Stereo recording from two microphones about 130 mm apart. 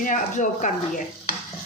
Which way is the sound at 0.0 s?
80° left.